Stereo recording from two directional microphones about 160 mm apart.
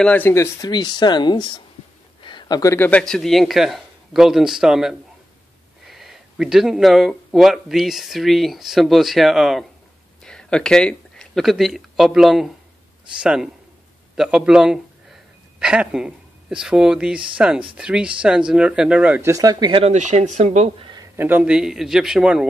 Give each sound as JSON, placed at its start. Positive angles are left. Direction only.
{"t": 0.0, "sound": "a man's voice", "side_deg": 10}
{"t": 19.3, "sound": "speech", "side_deg": -20}
{"t": 19.9, "sound": "speech", "side_deg": -45}
{"t": 20.8, "sound": "a sound", "side_deg": -25}
{"t": 21.2, "sound": "speech", "side_deg": -10}